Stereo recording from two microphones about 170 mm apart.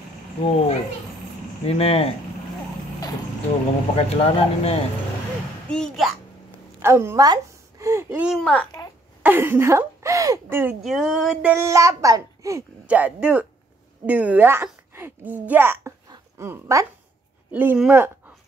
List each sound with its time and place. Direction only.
0.4 s speech: 35° left (ahead or behind)
3.9 s speech: 35° left (ahead or behind)
5.7 s a sound: centre (ahead or behind)
6.8 s speech: 15° right (ahead or behind)
10.8 s a sound: centre (ahead or behind)
11.5 s a child's voice: 15° right (ahead or behind)
12.8 s speech: 10° right (ahead or behind)